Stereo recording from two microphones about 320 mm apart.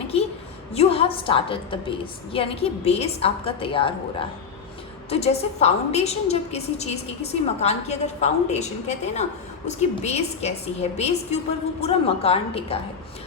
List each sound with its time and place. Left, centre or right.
0.7 s a woman's voice: centre